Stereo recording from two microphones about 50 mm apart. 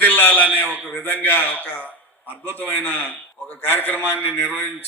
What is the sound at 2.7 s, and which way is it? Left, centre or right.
A man's voice, left.